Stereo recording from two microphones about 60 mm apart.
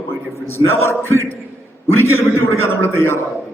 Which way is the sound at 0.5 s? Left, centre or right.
Left.